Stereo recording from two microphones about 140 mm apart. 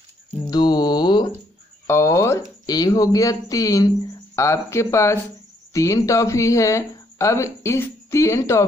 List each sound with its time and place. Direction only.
0.5 s mantra: 30° left (ahead or behind)
1.9 s speech: 20° left (ahead or behind)